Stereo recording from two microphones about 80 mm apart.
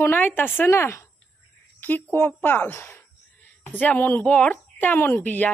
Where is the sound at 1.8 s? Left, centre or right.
Left.